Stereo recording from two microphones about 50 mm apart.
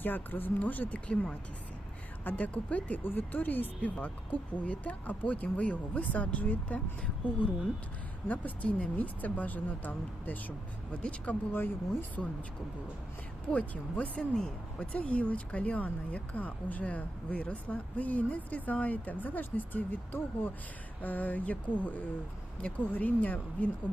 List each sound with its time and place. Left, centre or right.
0.0 s speech: left
3.0 s speech: left
8.3 s speech: left
10.9 s speech: left
11.5 s speech: left
13.5 s speech: left
14.2 s speech: centre
14.9 s speech: left